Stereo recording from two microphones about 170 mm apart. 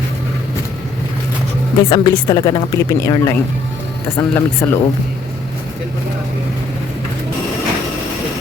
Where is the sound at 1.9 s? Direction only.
25° left (ahead or behind).